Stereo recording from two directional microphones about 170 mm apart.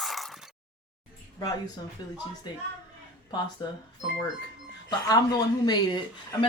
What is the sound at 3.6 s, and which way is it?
Speech, 25° left (ahead or behind).